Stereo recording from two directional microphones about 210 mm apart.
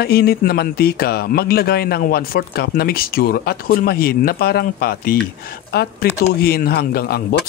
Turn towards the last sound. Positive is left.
turn(degrees=45)  # may be behind; listen again after turning